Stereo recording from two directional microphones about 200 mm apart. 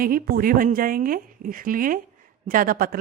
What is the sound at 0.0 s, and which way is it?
Speech, 45° right (ahead or behind).